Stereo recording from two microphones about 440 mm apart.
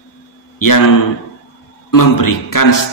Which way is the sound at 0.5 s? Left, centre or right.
Left.